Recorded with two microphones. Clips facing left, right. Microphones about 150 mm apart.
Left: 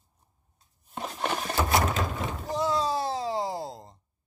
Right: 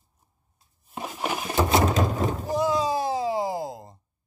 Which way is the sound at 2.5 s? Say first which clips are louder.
Right 2 dB; 10° right (ahead or behind).